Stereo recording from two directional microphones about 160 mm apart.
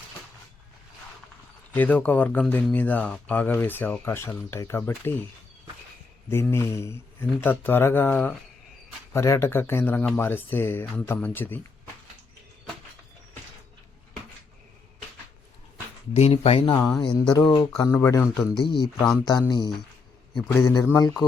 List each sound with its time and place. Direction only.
1.7 s speech: 10° left (ahead or behind)
6.3 s speech: 15° left (ahead or behind)
16.1 s speech: 40° left (ahead or behind)
17.9 s speech: 15° left (ahead or behind)